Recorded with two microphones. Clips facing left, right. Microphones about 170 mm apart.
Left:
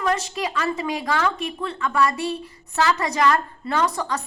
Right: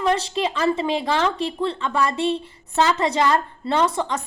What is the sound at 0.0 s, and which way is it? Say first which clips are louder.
A woman's voice: right 3 dB; 30° right (ahead or behind).